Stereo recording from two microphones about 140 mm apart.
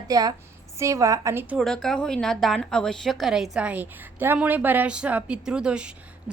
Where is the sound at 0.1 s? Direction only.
25° right (ahead or behind).